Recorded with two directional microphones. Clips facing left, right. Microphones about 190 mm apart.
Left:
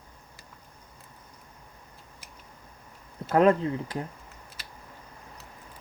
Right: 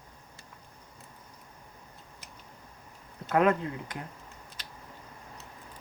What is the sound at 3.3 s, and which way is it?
Speech, 30° left (ahead or behind).